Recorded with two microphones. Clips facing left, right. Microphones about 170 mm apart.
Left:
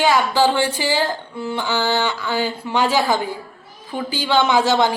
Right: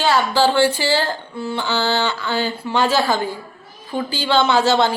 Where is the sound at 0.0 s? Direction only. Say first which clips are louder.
Even; 15° left (ahead or behind).